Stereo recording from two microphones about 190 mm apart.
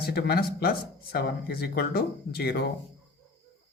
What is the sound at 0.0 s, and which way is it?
Speech, 55° left (ahead or behind).